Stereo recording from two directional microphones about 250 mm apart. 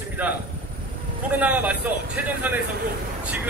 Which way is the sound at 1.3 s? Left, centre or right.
Centre.